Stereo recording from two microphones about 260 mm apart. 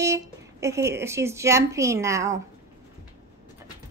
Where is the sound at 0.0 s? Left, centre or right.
Centre.